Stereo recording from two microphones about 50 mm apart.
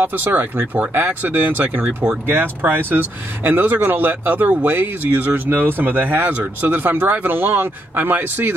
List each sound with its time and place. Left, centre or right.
0.0 s speech: right